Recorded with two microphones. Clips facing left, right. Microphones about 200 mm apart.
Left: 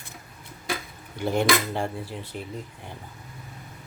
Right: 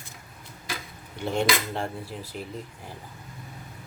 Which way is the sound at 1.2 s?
5° left (ahead or behind).